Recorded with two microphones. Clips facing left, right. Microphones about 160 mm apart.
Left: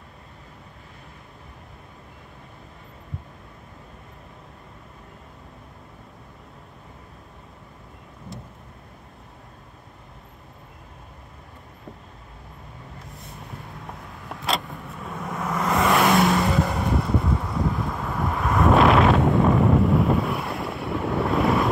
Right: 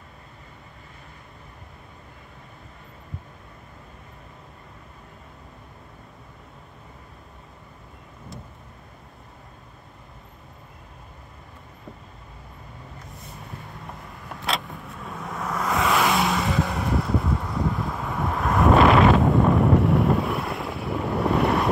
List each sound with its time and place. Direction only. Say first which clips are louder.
13.0 s vehicle: even; centre (ahead or behind)